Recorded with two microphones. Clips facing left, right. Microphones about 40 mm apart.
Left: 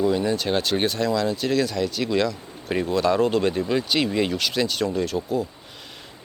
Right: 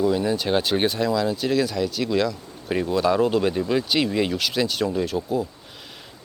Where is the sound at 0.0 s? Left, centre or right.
Centre.